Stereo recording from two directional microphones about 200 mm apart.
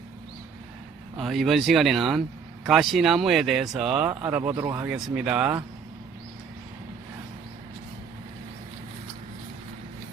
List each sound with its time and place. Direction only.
1.1 s speech: centre (ahead or behind)
4.9 s speech: 5° right (ahead or behind)